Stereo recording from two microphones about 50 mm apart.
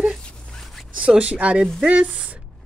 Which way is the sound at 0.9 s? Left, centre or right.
Right.